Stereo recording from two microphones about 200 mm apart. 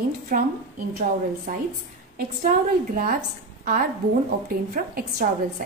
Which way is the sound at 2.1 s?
45° right (ahead or behind).